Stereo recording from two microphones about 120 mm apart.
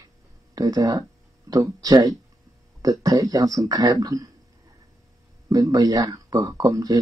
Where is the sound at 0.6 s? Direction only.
30° right (ahead or behind).